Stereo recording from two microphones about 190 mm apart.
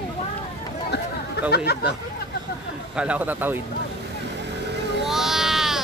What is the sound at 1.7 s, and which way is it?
Speech, 60° left (ahead or behind).